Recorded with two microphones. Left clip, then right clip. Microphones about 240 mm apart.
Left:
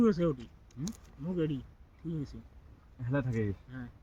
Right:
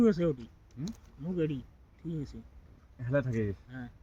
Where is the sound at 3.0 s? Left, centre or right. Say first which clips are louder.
Right 3 dB; centre.